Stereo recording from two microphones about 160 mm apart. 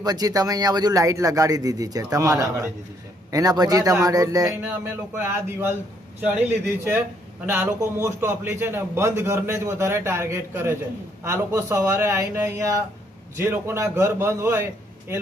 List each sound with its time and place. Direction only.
0.0 s speech: 25° right (ahead or behind)
6.2 s a man's voice: 10° right (ahead or behind)